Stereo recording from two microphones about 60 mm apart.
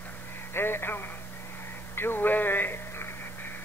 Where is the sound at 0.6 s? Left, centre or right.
Left.